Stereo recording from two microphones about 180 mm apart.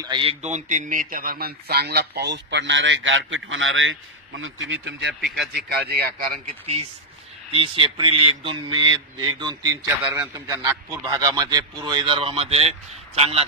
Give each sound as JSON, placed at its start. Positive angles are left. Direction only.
{"t": 0.0, "sound": "speech", "side_deg": -25}
{"t": 5.4, "sound": "a man's voice", "side_deg": -70}
{"t": 6.6, "sound": "a man's voice", "side_deg": -35}
{"t": 10.0, "sound": "a man's voice", "side_deg": -5}
{"t": 10.3, "sound": "a man's voice", "side_deg": -20}